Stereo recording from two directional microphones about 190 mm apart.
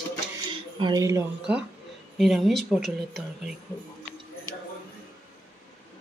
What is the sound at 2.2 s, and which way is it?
Speech, centre (ahead or behind).